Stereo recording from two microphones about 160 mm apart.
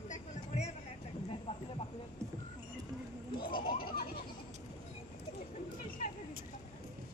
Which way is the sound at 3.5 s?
65° left (ahead or behind).